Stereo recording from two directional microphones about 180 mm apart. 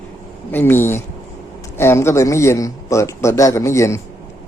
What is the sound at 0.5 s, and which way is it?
Speech, 10° left (ahead or behind).